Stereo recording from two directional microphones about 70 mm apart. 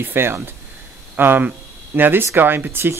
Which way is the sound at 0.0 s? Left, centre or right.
Right.